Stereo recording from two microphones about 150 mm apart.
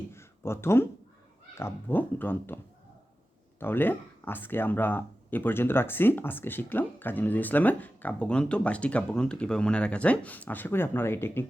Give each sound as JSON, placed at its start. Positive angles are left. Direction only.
{"t": 0.1, "sound": "speech", "side_deg": 15}
{"t": 3.6, "sound": "speech", "side_deg": 15}